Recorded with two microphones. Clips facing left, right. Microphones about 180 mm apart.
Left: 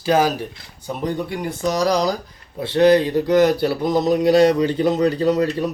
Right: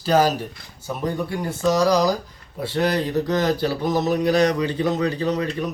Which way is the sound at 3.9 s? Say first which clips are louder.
Left 5 dB; 30° left (ahead or behind).